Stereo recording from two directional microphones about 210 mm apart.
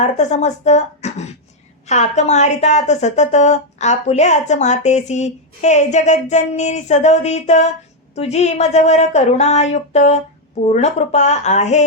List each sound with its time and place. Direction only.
0.0 s a woman's voice: 35° left (ahead or behind)